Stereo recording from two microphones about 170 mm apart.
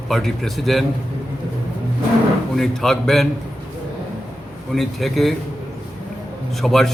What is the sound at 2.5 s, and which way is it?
Speech, centre (ahead or behind).